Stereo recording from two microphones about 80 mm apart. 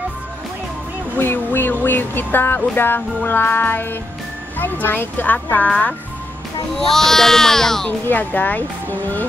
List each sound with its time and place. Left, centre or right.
1.1 s speech: left
6.9 s speech: centre
8.1 s speech: left